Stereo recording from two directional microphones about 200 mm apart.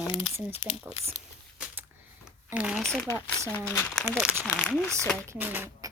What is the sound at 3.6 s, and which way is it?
Speech, 10° left (ahead or behind).